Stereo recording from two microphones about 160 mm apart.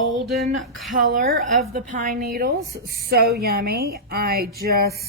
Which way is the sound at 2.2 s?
70° right (ahead or behind).